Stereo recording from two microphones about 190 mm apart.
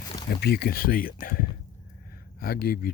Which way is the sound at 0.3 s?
60° left (ahead or behind).